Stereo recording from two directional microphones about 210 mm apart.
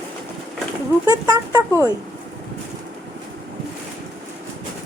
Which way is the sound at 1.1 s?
20° right (ahead or behind).